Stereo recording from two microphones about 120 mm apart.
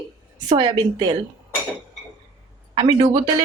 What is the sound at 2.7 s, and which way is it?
Speech, 40° right (ahead or behind).